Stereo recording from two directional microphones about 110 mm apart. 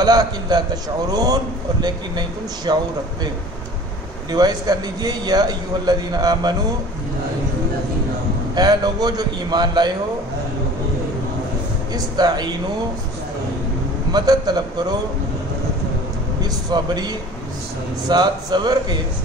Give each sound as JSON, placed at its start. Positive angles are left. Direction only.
{"t": 0.0, "sound": "a man's voice", "side_deg": -35}
{"t": 4.3, "sound": "a man's voice", "side_deg": -35}
{"t": 8.5, "sound": "a man's voice", "side_deg": -35}
{"t": 11.9, "sound": "a man's voice", "side_deg": -40}
{"t": 14.1, "sound": "a man's voice", "side_deg": -35}
{"t": 16.4, "sound": "a man's voice", "side_deg": -40}